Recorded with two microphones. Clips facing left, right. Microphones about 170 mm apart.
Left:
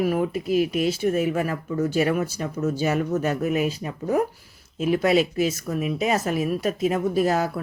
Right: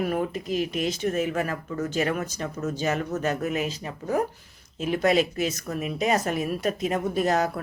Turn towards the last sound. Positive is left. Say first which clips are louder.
# left 2 dB
turn(degrees=5)  # may be behind; listen again after turning